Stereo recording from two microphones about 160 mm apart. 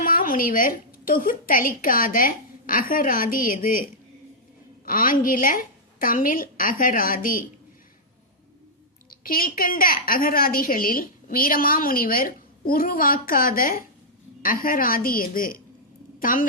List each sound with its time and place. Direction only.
0.0 s a woman's voice: 60° left (ahead or behind)
4.9 s a woman's voice: 60° left (ahead or behind)
9.0 s a woman's voice: 65° left (ahead or behind)